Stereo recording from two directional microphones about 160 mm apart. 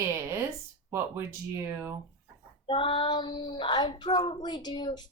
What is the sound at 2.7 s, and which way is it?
Child singing, 30° left (ahead or behind).